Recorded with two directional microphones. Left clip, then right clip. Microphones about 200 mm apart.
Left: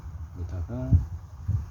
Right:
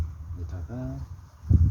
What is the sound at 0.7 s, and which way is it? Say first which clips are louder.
Speech: left 2 dB; 25° left (ahead or behind).